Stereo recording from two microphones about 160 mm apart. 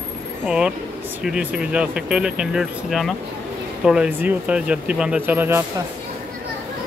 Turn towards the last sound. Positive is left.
turn(degrees=-15)  # may be behind; listen again after turning